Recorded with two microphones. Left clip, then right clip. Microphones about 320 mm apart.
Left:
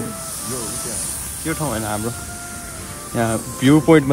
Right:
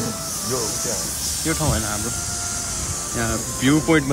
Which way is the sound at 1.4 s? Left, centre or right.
Centre.